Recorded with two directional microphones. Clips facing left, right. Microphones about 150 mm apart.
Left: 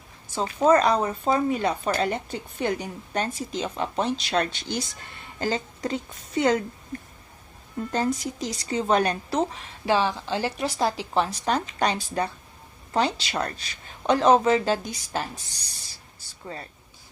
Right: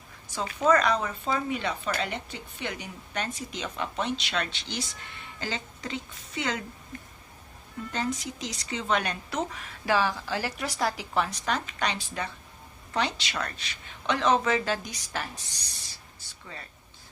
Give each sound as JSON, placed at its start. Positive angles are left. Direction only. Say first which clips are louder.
{"t": 0.3, "sound": "speech", "louder": "left 4 dB", "side_deg": 30}
{"t": 7.9, "sound": "speech", "louder": "left 6 dB", "side_deg": 35}